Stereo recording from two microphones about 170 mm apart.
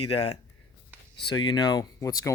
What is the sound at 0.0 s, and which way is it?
Speech, 35° left (ahead or behind).